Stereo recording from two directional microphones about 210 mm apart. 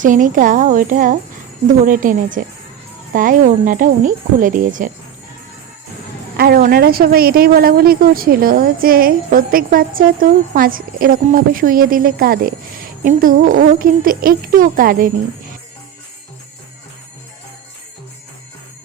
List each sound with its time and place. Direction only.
0.0 s speech: 40° right (ahead or behind)
6.3 s a woman's voice: 45° right (ahead or behind)